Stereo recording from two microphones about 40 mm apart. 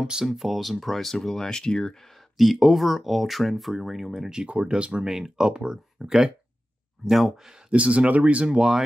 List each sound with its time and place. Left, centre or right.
0.0 s speech: centre
0.3 s speech: centre; by 2.0 s left
2.3 s speech: centre
4.5 s speech: right
5.0 s speech: centre
7.1 s speech: centre
7.7 s speech: right
8.5 s speech: centre